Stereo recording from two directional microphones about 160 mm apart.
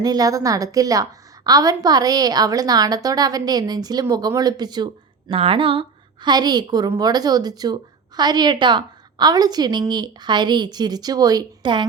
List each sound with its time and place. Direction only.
0.0 s a woman's voice: 25° right (ahead or behind)